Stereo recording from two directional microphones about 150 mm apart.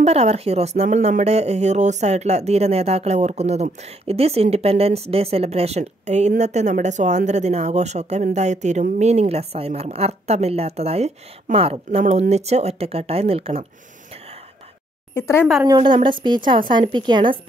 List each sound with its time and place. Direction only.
0.0 s speech: 45° right (ahead or behind)
15.1 s speech: 15° left (ahead or behind)
15.6 s a woman's voice: 30° right (ahead or behind)